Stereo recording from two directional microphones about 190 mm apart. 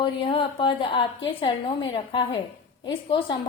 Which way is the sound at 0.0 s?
25° left (ahead or behind).